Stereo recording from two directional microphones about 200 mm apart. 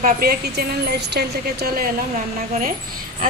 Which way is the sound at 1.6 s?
45° right (ahead or behind).